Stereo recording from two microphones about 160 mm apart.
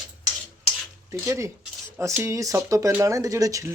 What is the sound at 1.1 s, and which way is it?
Speech, 20° right (ahead or behind).